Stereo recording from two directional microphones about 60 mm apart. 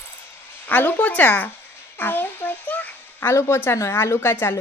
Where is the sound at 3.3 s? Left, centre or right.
Left.